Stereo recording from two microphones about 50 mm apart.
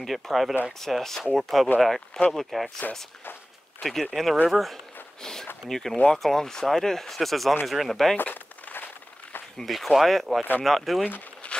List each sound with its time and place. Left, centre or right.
0.0 s speech: centre
3.8 s speech: centre
5.2 s speech: centre
8.2 s walk: left
9.7 s speech: centre